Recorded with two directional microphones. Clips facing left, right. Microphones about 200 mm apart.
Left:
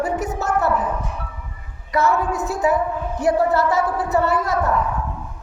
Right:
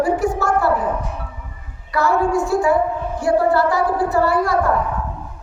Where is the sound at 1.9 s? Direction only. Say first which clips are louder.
Right 2 dB; 20° left (ahead or behind).